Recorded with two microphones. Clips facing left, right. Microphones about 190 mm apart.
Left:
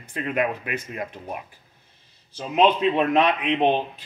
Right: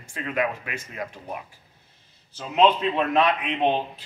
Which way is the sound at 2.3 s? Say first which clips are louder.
Even; 15° left (ahead or behind).